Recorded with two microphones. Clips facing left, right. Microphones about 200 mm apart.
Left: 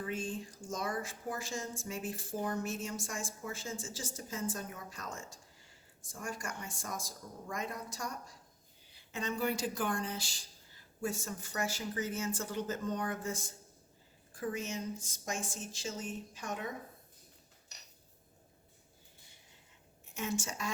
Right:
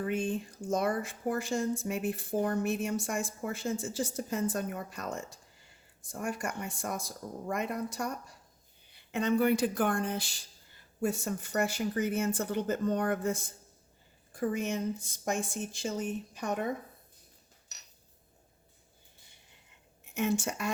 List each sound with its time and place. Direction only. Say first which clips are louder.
0.1 s speech: right 7 dB; 60° right (ahead or behind)
20.1 s speech: right 7 dB; 60° right (ahead or behind)